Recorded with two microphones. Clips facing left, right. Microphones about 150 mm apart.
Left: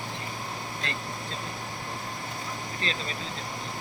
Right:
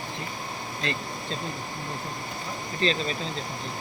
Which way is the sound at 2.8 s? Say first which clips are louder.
Right 9 dB; 30° right (ahead or behind).